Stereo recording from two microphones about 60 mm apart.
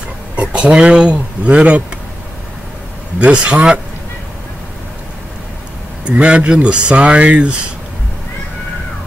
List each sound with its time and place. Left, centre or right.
0.4 s speech: centre
3.2 s speech: right
6.0 s speech: centre